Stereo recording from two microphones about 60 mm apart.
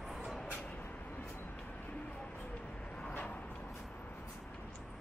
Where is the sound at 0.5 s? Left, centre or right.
Left.